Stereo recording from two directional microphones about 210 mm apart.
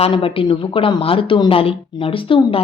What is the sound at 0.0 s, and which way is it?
A woman's voice, 25° left (ahead or behind).